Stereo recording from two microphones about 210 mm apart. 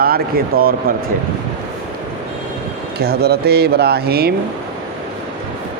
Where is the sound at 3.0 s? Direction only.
50° right (ahead or behind).